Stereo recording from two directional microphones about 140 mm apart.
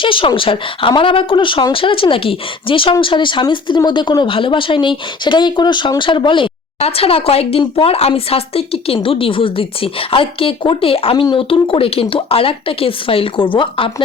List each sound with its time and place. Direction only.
0.0 s speech: 40° left (ahead or behind)